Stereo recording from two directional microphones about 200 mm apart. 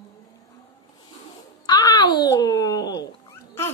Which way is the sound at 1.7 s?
20° left (ahead or behind).